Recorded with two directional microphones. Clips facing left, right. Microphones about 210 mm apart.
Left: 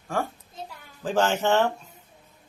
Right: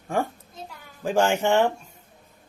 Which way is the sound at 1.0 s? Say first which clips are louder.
Right 2 dB; 10° right (ahead or behind).